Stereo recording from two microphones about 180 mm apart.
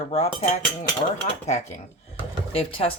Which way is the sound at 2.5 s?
30° left (ahead or behind).